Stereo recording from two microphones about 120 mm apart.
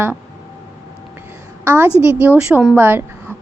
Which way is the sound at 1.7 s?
20° right (ahead or behind).